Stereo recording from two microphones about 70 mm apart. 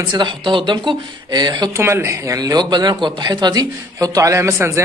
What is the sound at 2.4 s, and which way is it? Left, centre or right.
A man's voice, right.